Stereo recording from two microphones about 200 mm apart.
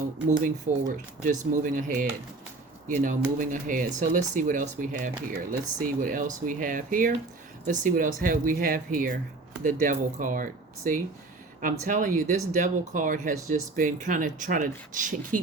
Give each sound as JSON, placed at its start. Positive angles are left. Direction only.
{"t": 0.3, "sound": "speech", "side_deg": -40}